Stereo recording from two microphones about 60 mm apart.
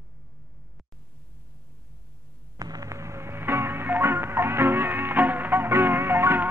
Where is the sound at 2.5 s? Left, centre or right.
Right.